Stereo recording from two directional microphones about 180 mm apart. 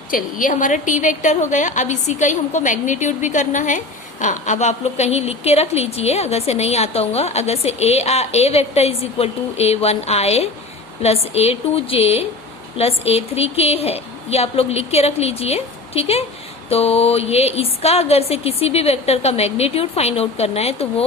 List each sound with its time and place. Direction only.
0.1 s a woman's voice: 45° left (ahead or behind)